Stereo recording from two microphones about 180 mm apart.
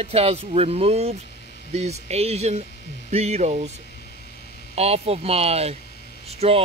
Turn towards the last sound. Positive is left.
turn(degrees=-35)  # may be behind; listen again after turning